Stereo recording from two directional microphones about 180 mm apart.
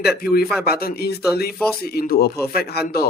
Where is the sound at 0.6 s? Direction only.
60° left (ahead or behind).